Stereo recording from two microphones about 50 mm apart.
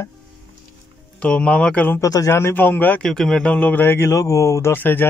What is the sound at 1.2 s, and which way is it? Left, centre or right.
Speech, left.